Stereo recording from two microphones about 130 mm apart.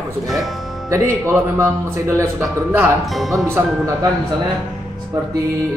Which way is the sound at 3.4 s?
20° right (ahead or behind).